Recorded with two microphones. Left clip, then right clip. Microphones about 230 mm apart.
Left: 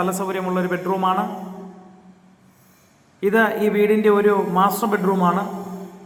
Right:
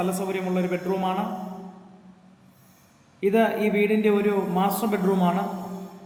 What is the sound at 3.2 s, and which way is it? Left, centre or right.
Speech, centre.